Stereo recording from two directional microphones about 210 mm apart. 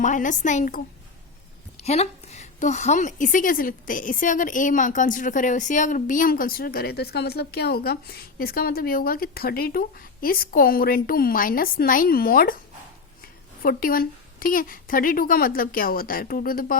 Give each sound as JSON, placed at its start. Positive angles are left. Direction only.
{"t": 0.0, "sound": "a woman's voice", "side_deg": 35}
{"t": 1.8, "sound": "a woman's voice", "side_deg": 30}